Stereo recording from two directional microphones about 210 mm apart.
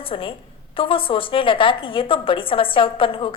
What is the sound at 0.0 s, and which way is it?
A woman's voice, 25° left (ahead or behind).